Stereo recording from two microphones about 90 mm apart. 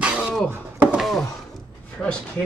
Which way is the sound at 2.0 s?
20° left (ahead or behind).